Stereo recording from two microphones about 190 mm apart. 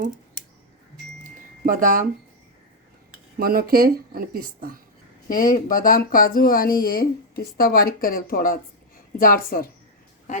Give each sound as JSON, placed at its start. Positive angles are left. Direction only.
{"t": 1.6, "sound": "speech", "side_deg": -45}
{"t": 3.3, "sound": "speech", "side_deg": -50}
{"t": 5.3, "sound": "speech", "side_deg": 50}